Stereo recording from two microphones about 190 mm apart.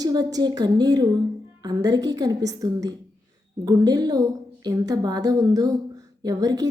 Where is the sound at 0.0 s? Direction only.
20° right (ahead or behind).